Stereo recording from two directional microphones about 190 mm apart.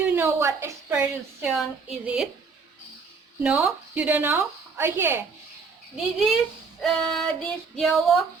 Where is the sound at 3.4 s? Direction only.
10° right (ahead or behind).